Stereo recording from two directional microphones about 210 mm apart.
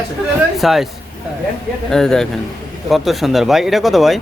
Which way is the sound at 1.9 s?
Centre (ahead or behind).